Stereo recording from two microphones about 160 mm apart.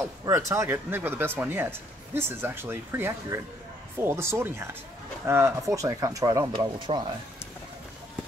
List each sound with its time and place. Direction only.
0.2 s speech: 20° right (ahead or behind)